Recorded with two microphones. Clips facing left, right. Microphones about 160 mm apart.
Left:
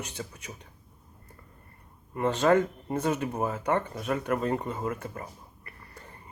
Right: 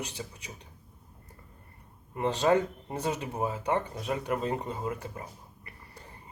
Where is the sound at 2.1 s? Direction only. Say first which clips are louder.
Left 2 dB; 15° right (ahead or behind).